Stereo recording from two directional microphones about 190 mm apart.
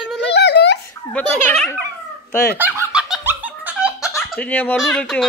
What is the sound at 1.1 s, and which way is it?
Speech, 5° left (ahead or behind).